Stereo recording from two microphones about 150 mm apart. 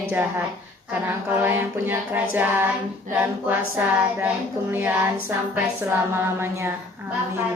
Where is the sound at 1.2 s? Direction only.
15° right (ahead or behind).